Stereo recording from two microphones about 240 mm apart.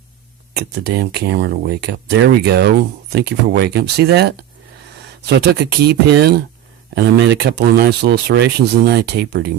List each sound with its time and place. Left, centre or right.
0.5 s speech: right